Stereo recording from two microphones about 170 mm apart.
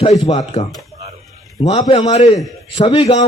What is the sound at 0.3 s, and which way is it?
Speech, 40° left (ahead or behind).